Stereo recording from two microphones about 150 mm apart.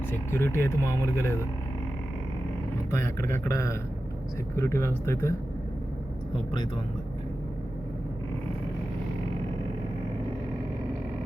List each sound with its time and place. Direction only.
0.1 s speech: 15° left (ahead or behind)
2.9 s speech: 15° left (ahead or behind)